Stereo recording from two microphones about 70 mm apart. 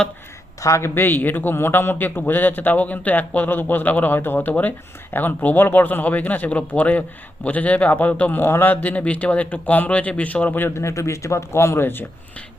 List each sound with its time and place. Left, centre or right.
0.6 s speech: left
0.9 s a man's voice: left
10.8 s speech: left